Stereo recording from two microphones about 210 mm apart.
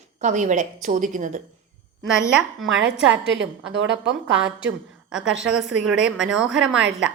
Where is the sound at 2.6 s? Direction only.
65° right (ahead or behind).